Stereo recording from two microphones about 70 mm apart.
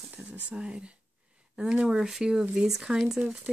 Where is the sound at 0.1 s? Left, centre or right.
Centre.